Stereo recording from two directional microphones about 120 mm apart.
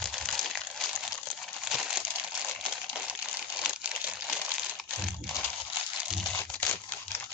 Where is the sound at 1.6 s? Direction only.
5° right (ahead or behind).